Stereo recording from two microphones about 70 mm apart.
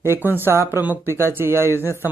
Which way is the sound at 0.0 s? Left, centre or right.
Right.